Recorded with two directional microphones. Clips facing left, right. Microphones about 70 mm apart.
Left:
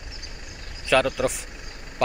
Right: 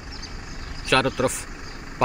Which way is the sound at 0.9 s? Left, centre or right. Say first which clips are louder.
Even; centre.